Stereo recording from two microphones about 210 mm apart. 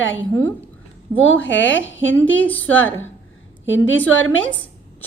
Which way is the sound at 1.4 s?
60° left (ahead or behind).